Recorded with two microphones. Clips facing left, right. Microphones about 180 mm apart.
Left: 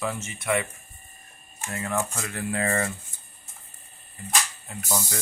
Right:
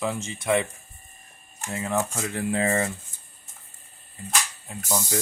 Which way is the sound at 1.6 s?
15° right (ahead or behind).